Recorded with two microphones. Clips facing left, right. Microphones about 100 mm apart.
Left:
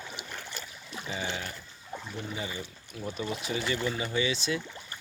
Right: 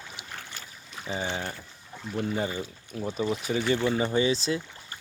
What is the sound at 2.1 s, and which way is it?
Speech, 50° right (ahead or behind).